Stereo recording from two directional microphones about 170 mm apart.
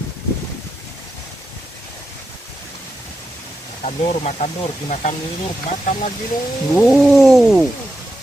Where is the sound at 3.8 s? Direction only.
40° left (ahead or behind).